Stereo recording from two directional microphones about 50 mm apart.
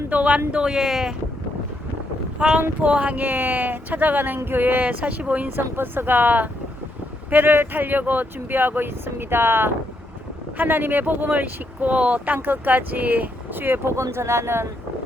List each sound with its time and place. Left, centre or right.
0.1 s speech: right
2.6 s speech: right
3.2 s speech: right
4.9 s speech: right
5.5 s speech: right
13.9 s speech: right